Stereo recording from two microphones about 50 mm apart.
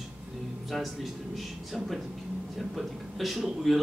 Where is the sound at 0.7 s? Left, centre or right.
Centre.